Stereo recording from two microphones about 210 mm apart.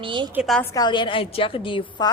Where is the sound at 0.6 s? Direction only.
15° left (ahead or behind).